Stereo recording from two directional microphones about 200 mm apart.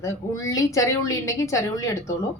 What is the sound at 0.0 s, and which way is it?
A woman's voice, 15° left (ahead or behind).